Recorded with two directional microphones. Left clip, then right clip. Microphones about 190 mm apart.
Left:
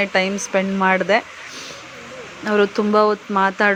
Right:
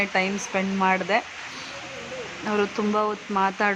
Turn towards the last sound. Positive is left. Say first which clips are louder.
# left 6 dB
turn(degrees=20)  # may be behind; listen again after turning